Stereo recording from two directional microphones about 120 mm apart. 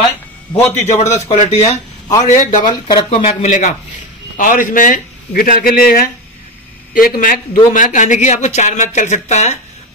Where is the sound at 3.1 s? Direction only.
65° left (ahead or behind); by 4.9 s 90° left.